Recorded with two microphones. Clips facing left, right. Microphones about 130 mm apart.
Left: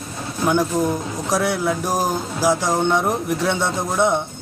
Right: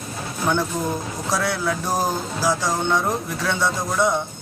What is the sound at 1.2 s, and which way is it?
Speech, 15° left (ahead or behind).